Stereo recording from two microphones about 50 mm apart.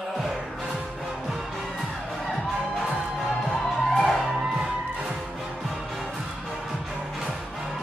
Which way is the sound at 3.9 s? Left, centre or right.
Centre.